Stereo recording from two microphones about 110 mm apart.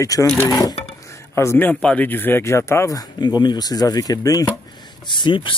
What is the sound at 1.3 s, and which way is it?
Speech, 25° left (ahead or behind).